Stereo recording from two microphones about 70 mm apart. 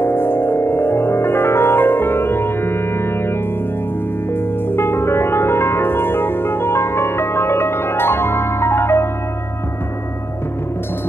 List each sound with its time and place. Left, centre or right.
0.0 s music: left
4.3 s music: left